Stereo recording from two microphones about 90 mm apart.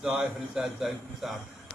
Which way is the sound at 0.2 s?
5° right (ahead or behind).